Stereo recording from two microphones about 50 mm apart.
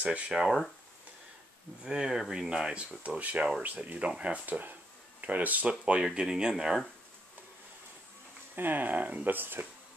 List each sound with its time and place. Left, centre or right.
0.0 s speech: right
1.9 s speech: centre
3.2 s speech: right
5.7 s speech: right
6.2 s speech: centre
8.5 s speech: right